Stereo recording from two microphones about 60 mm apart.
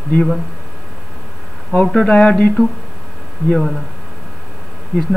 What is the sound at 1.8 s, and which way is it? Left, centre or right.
Speech, centre.